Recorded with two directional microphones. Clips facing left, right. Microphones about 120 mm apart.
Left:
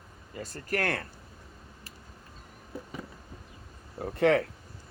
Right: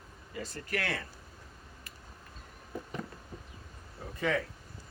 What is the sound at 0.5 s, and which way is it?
Speech, 45° left (ahead or behind).